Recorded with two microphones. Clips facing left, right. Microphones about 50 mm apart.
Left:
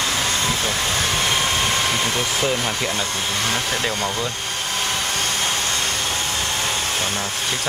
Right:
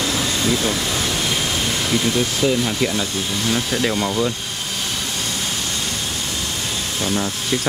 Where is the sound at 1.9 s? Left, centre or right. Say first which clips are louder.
Right 2 dB; left.